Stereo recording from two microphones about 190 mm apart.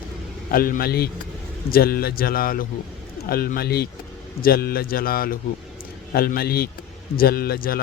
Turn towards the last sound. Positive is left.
turn(degrees=50)  # may be behind; listen again after turning